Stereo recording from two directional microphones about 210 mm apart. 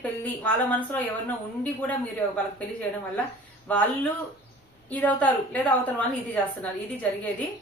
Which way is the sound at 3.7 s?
10° left (ahead or behind).